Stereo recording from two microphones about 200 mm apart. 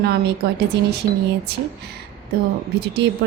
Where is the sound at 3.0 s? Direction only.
55° right (ahead or behind).